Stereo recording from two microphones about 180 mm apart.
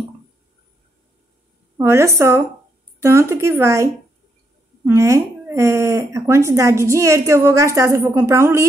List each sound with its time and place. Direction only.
1.8 s speech: 15° right (ahead or behind)